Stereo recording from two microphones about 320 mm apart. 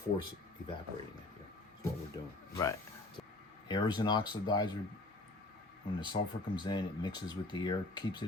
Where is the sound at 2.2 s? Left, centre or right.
Centre.